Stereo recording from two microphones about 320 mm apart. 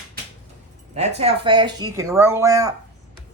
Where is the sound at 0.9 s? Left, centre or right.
Centre.